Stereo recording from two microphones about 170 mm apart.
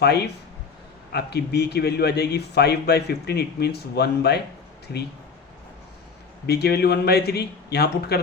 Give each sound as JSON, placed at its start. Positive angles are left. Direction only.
{"t": 0.0, "sound": "speech", "side_deg": 70}
{"t": 6.4, "sound": "speech", "side_deg": 70}